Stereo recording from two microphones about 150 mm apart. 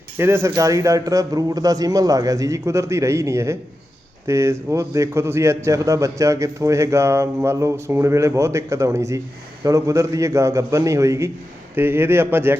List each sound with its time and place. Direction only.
0.2 s a man's voice: 15° right (ahead or behind)